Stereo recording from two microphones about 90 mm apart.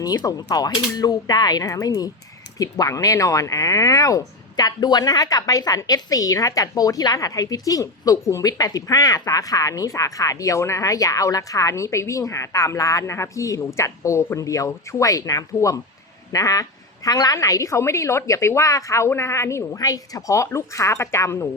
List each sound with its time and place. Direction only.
0.0 s speech: 45° left (ahead or behind)